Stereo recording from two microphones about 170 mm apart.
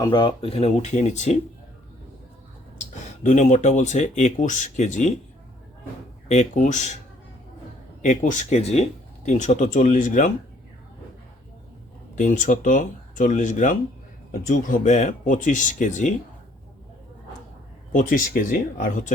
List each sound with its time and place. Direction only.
0.0 s speech: 25° left (ahead or behind); by 1.4 s 45° left (ahead or behind)
3.2 s speech: 45° left (ahead or behind)
6.2 s speech: 40° left (ahead or behind)
8.0 s speech: 45° left (ahead or behind)
12.1 s speech: 50° left (ahead or behind)
17.9 s speech: 50° left (ahead or behind)